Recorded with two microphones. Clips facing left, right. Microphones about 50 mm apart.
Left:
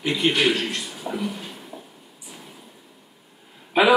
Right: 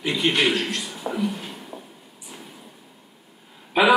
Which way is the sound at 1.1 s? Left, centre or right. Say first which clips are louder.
Right 2 dB; right.